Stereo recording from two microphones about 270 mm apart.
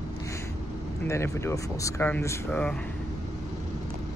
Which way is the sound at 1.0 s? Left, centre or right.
Centre.